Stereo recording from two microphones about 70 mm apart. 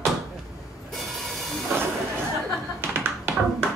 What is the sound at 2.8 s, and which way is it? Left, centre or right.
Tap, right.